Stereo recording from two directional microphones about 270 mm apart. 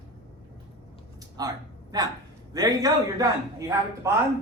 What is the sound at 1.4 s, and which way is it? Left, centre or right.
A man's voice, centre.